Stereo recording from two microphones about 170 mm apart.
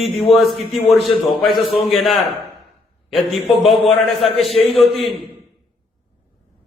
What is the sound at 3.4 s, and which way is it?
A man's voice, centre (ahead or behind).